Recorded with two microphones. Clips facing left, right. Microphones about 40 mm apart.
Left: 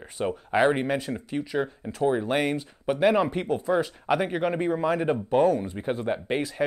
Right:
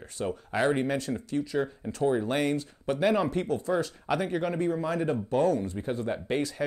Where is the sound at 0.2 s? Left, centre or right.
Left.